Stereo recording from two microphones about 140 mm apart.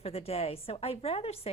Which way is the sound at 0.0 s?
45° left (ahead or behind).